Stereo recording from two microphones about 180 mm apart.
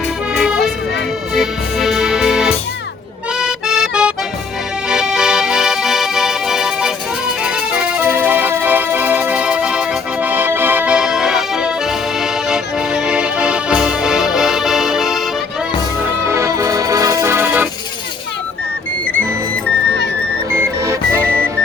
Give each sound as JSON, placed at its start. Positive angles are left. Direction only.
{"t": 0.3, "sound": "accordion", "side_deg": -5}
{"t": 1.3, "sound": "music", "side_deg": 0}
{"t": 3.3, "sound": "accordion", "side_deg": 0}
{"t": 4.9, "sound": "music", "side_deg": -5}
{"t": 16.2, "sound": "accordion", "side_deg": -15}
{"t": 20.6, "sound": "music", "side_deg": -15}